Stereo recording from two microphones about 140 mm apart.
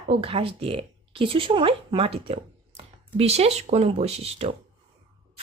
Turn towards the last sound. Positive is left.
turn(degrees=-45)  # may be behind; listen again after turning